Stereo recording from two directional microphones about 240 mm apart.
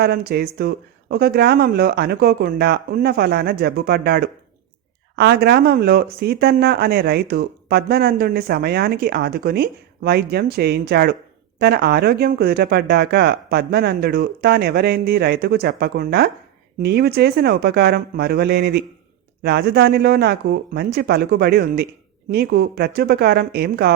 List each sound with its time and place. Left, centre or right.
0.0 s speech: right